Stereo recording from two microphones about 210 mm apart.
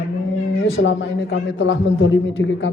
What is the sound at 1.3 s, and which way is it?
Speech, 60° left (ahead or behind).